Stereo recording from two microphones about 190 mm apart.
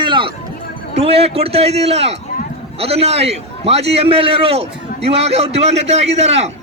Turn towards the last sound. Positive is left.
turn(degrees=-35)  # may be behind; listen again after turning